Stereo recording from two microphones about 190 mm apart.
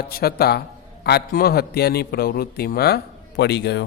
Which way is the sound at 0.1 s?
55° left (ahead or behind).